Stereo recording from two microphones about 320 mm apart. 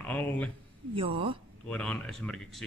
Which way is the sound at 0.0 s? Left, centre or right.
Centre.